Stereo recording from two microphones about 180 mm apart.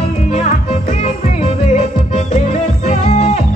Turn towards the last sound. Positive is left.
turn(degrees=35)  # may be behind; listen again after turning